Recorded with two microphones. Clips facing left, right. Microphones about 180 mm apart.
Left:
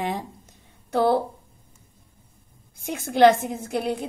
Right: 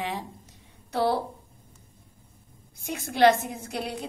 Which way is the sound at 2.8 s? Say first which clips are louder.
Left 5 dB; 50° left (ahead or behind).